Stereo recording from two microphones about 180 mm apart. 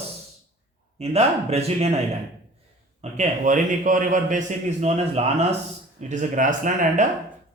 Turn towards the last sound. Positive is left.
turn(degrees=-45)  # may be behind; listen again after turning